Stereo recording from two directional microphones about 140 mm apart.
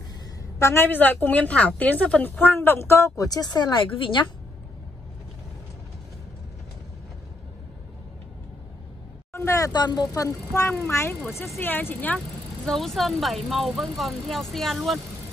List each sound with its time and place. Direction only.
0.6 s a woman's voice: 20° left (ahead or behind)
9.3 s a woman's voice: 20° left (ahead or behind)
12.6 s speech: centre (ahead or behind)